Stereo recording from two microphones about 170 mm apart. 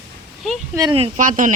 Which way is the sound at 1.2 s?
50° right (ahead or behind).